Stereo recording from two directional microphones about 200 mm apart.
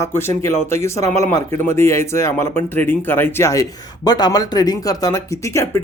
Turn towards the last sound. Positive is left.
turn(degrees=15)  # may be behind; listen again after turning